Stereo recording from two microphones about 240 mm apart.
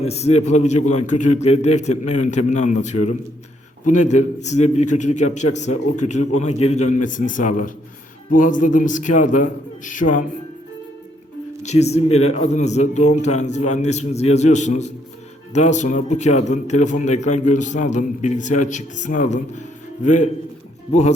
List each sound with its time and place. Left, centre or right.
0.0 s a man's voice: left
11.6 s a man's voice: left